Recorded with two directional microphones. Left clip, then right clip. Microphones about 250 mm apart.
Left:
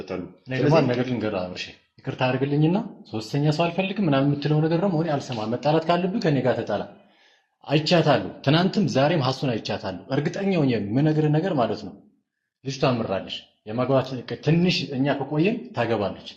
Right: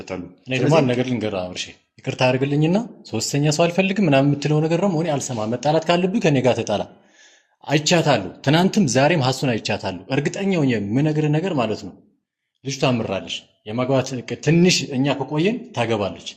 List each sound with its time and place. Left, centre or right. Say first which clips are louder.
0.0 s speech: right 1 dB; right
2.0 s speech: right 5 dB; right
7.6 s speech: right 2 dB; right